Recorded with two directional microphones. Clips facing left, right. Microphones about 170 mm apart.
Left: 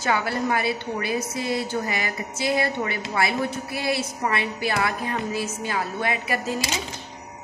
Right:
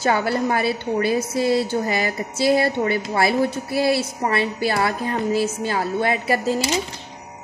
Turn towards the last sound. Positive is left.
turn(degrees=-30)  # may be behind; listen again after turning